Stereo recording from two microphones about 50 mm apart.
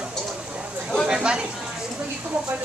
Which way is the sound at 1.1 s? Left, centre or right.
Centre.